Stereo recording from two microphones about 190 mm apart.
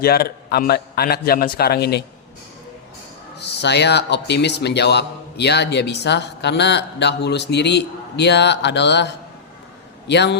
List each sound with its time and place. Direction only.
0.0 s speech: 55° left (ahead or behind)
3.3 s speech: 60° left (ahead or behind)